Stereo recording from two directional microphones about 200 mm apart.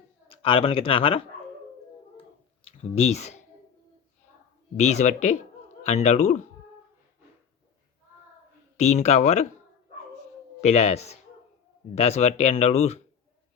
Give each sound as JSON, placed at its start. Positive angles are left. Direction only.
{"t": 0.3, "sound": "speech", "side_deg": 25}
{"t": 2.6, "sound": "speech", "side_deg": 30}
{"t": 4.8, "sound": "speech", "side_deg": 35}
{"t": 8.8, "sound": "speech", "side_deg": 35}
{"t": 10.6, "sound": "speech", "side_deg": 35}